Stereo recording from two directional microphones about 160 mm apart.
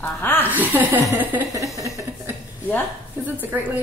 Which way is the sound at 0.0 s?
15° left (ahead or behind).